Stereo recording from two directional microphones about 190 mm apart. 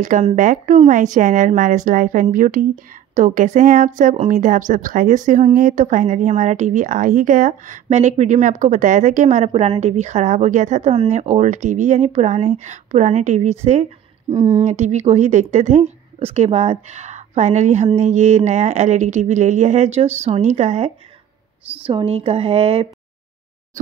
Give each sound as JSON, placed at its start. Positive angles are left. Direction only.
{"t": 0.0, "sound": "speech", "side_deg": -40}